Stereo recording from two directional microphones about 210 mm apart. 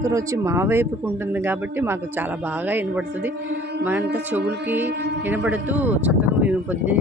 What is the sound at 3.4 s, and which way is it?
Mantra, 55° right (ahead or behind).